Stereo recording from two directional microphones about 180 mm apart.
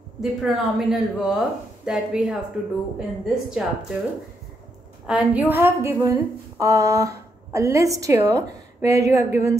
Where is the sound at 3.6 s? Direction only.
5° right (ahead or behind).